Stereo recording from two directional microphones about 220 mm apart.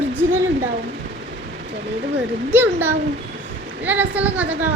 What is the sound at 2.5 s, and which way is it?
A woman's voice, 10° right (ahead or behind).